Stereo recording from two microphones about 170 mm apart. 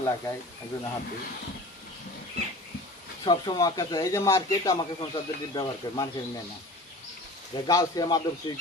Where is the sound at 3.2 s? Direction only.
25° left (ahead or behind).